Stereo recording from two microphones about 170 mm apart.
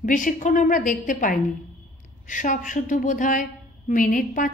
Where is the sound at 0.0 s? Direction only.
50° left (ahead or behind).